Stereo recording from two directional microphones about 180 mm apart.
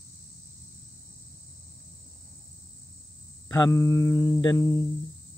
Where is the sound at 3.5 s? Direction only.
15° left (ahead or behind).